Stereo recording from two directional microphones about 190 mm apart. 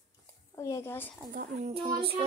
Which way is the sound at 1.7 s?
30° right (ahead or behind).